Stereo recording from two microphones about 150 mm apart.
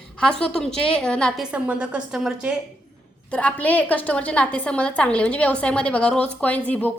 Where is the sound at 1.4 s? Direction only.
5° right (ahead or behind).